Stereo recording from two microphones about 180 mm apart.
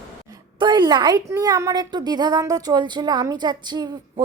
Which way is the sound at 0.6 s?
25° right (ahead or behind).